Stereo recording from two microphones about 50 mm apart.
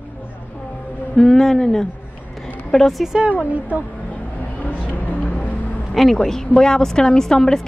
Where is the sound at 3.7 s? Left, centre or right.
Right.